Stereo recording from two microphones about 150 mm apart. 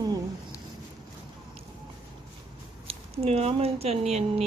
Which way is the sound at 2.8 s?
40° right (ahead or behind).